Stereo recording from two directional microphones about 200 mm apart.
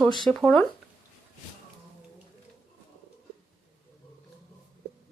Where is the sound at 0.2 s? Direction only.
5° left (ahead or behind).